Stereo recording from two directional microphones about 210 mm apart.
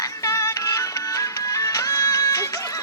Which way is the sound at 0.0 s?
15° left (ahead or behind).